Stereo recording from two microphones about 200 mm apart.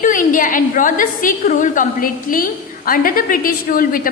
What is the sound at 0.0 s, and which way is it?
A woman's voice, 40° left (ahead or behind).